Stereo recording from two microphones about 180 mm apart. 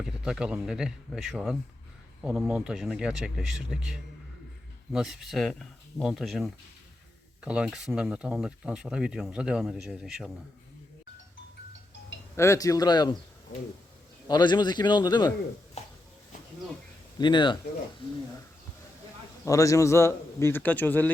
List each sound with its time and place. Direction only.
0.0 s speech: 5° right (ahead or behind)
12.4 s speech: 15° left (ahead or behind)
14.3 s speech: 25° left (ahead or behind)
15.8 s a sound: 35° left (ahead or behind)
17.2 s speech: 25° left (ahead or behind)
19.5 s speech: 20° left (ahead or behind)